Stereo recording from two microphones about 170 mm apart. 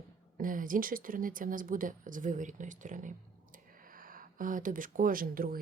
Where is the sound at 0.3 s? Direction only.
55° right (ahead or behind).